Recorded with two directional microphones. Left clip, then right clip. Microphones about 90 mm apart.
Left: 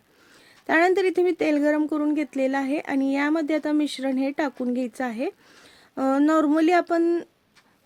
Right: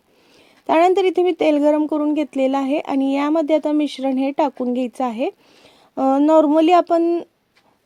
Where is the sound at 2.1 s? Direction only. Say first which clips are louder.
Right 5 dB; 25° right (ahead or behind).